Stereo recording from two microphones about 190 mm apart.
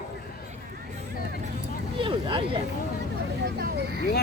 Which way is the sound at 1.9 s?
25° right (ahead or behind).